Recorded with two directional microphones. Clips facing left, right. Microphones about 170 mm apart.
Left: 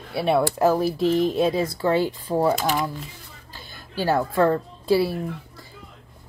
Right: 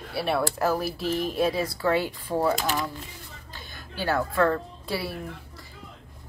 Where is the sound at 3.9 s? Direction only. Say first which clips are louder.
Left 4 dB; 30° left (ahead or behind).